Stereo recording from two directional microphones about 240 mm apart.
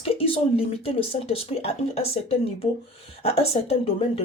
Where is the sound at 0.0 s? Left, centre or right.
Left.